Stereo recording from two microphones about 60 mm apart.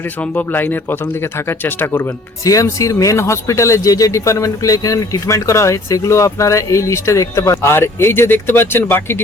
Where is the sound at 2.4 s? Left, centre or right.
Left.